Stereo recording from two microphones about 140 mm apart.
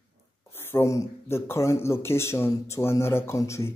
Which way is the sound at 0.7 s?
20° left (ahead or behind).